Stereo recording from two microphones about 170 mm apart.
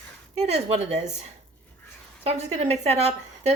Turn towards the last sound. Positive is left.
turn(degrees=-40)  # may be behind; listen again after turning